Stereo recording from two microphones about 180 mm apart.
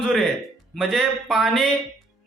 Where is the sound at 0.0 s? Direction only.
Centre (ahead or behind).